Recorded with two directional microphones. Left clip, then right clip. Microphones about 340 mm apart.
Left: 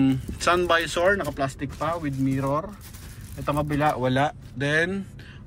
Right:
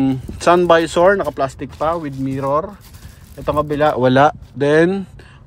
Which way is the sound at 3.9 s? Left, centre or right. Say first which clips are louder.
Right 11 dB; right.